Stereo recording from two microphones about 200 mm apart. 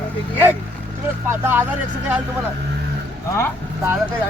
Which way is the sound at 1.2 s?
10° right (ahead or behind).